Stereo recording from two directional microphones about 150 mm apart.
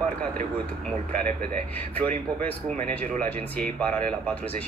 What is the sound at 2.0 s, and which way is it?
Speech, 10° left (ahead or behind).